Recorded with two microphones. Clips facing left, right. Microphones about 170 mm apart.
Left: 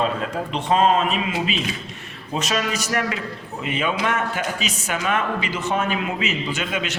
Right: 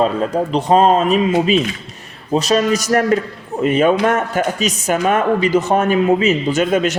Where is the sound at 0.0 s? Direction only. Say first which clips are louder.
Right 7 dB; 40° right (ahead or behind).